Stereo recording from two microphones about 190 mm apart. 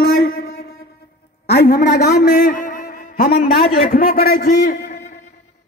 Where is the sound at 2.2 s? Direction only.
40° left (ahead or behind).